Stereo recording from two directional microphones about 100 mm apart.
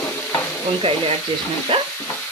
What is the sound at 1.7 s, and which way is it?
Stir, 55° right (ahead or behind).